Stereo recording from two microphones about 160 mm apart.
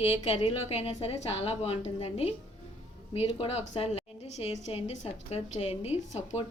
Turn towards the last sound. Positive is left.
turn(degrees=45)  # may be behind; listen again after turning